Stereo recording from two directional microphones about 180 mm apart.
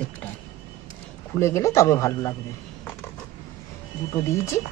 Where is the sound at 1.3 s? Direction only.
15° left (ahead or behind).